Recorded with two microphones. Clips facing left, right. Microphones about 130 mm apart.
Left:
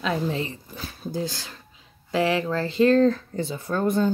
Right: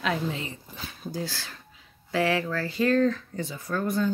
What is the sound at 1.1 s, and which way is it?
Speech, 20° left (ahead or behind).